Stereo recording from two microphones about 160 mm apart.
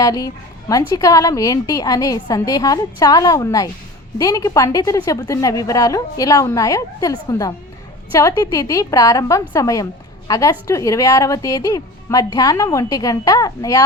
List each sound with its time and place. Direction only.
0.0 s a woman's voice: 25° left (ahead or behind)